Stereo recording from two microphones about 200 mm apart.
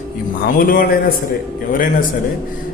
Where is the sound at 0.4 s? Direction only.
45° left (ahead or behind).